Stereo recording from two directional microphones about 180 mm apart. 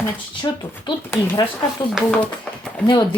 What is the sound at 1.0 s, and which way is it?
Speech, 10° left (ahead or behind).